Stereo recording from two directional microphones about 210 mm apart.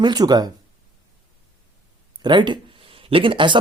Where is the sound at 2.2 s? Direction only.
20° right (ahead or behind).